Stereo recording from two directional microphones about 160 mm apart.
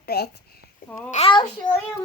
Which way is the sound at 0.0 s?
85° left.